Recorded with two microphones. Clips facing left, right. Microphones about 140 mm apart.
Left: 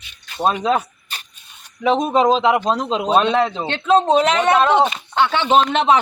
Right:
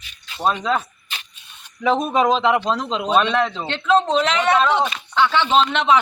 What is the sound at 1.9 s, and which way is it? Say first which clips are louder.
Speech: left 2 dB; 20° left (ahead or behind).